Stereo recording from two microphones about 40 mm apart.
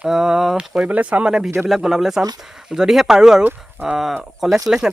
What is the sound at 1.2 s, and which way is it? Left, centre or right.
Speech, centre.